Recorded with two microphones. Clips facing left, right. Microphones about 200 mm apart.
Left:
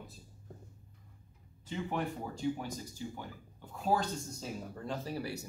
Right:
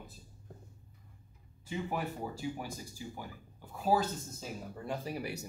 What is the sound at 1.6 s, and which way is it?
Speech, 10° right (ahead or behind).